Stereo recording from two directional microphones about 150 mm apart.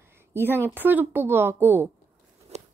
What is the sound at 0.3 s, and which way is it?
A woman's voice, 15° right (ahead or behind).